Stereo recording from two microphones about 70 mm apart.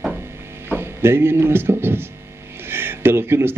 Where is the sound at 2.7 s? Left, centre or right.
Right.